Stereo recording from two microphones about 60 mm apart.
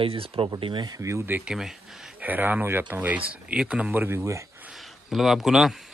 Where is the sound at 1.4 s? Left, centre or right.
Centre.